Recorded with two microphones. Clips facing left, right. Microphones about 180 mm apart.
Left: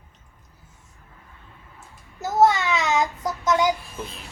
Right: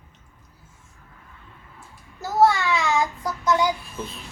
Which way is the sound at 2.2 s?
20° left (ahead or behind).